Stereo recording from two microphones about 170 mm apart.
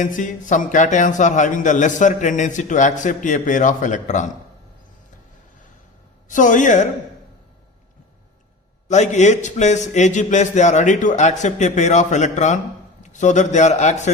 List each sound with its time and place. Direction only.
0.0 s a man's voice: 50° left (ahead or behind)
6.2 s a man's voice: 50° left (ahead or behind)
8.9 s a man's voice: 45° left (ahead or behind)